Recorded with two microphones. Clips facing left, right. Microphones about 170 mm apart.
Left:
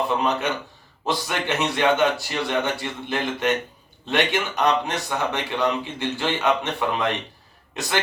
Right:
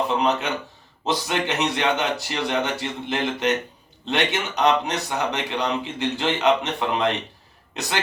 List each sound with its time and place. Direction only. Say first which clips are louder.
0.2 s speech: right 1 dB; 20° right (ahead or behind)